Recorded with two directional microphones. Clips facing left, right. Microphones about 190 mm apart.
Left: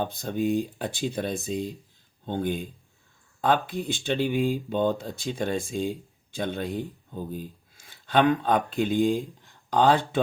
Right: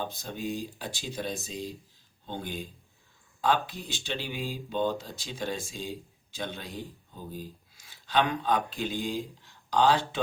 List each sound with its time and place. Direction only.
0.0 s speech: 55° left (ahead or behind)